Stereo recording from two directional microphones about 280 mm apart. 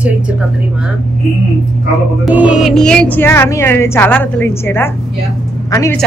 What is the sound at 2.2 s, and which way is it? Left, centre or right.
A woman's voice, centre.